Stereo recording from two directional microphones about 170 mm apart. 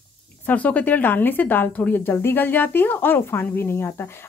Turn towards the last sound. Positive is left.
turn(degrees=15)  # may be behind; listen again after turning